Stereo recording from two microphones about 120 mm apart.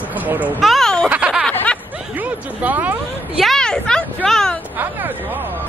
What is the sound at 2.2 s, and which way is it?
Speech, 15° right (ahead or behind).